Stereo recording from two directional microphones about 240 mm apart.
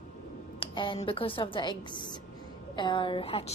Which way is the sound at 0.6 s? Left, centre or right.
Centre.